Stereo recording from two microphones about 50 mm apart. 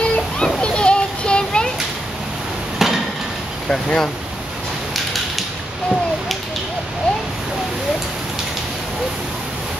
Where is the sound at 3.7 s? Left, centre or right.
Centre.